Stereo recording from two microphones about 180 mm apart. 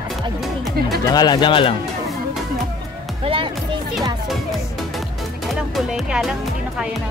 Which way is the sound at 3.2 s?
30° right (ahead or behind).